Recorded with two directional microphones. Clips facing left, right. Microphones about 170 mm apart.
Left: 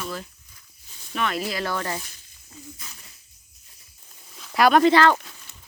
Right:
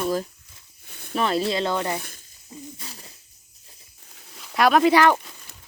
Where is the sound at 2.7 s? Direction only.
30° right (ahead or behind).